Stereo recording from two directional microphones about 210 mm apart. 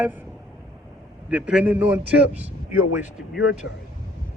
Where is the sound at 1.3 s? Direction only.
5° right (ahead or behind).